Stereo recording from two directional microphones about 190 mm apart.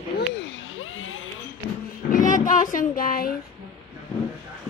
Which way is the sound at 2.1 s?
45° left (ahead or behind).